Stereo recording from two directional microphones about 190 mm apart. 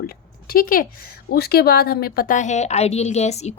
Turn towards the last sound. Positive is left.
turn(degrees=35)  # may be behind; listen again after turning